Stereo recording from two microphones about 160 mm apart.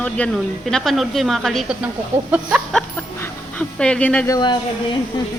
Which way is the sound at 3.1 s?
15° left (ahead or behind).